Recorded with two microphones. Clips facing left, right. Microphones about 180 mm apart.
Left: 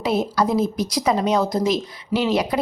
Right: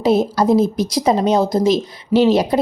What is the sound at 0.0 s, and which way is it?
A woman's voice, 25° right (ahead or behind).